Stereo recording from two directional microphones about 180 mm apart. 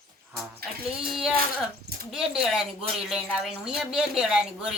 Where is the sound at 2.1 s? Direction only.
5° right (ahead or behind).